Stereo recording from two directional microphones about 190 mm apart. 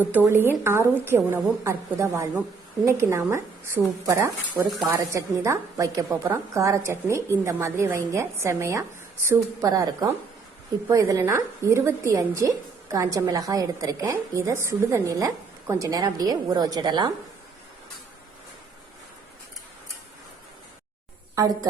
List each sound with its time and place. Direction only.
0.0 s a woman's voice: 10° right (ahead or behind)